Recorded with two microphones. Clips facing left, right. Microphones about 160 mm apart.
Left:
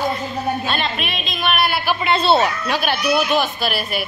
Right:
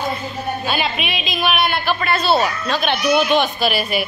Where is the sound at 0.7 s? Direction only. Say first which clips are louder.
Right 1 dB; 5° right (ahead or behind); by 2.1 s 10° left (ahead or behind).